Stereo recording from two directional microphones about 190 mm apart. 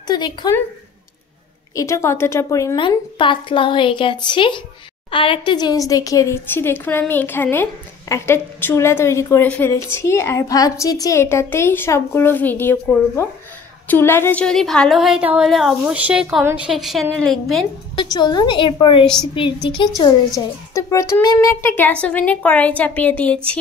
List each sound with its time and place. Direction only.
0.0 s a woman's voice: 20° left (ahead or behind)
1.8 s a woman's voice: 15° left (ahead or behind)
17.9 s a woman's voice: 20° left (ahead or behind); by 23.6 s 5° left (ahead or behind)